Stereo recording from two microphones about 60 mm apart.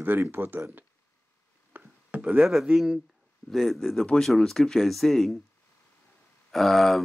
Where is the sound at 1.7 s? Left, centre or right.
Right.